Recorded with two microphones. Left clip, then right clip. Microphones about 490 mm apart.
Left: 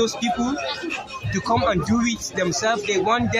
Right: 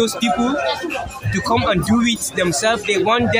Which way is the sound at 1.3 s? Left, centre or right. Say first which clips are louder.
Right 3 dB; left.